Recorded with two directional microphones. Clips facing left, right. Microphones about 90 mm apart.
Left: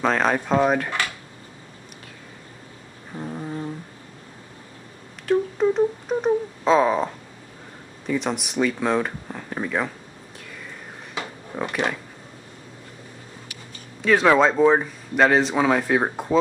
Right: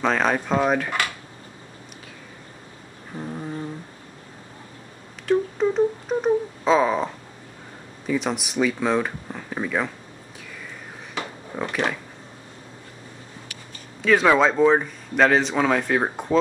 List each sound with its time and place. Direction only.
0.0 s speech: centre (ahead or behind)
3.2 s humming: 5° left (ahead or behind)
5.2 s a sound: centre (ahead or behind)
8.1 s speech: centre (ahead or behind)
11.5 s a sound: 5° left (ahead or behind)
14.0 s speech: centre (ahead or behind)